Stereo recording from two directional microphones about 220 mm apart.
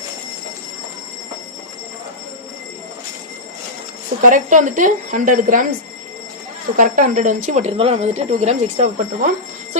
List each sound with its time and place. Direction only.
4.2 s speech: 35° right (ahead or behind)
6.7 s speech: 35° right (ahead or behind)